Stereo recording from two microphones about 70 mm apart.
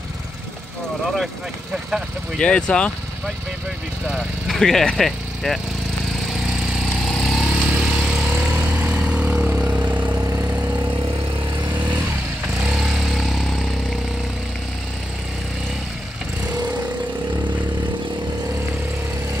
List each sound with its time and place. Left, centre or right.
2.3 s speech: centre
4.5 s speech: centre
7.1 s vehicle: centre
8.5 s vehicle: centre
10.2 s vehicle: right
11.7 s vehicle: right
12.6 s vehicle: centre